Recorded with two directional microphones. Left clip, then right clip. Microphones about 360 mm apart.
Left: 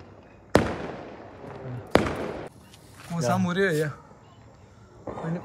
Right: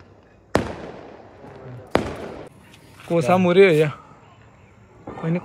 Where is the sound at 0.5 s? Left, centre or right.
Centre.